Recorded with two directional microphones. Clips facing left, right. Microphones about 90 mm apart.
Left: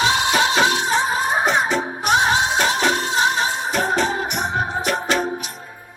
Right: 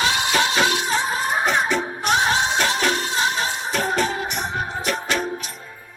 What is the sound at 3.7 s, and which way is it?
Music, 20° left (ahead or behind).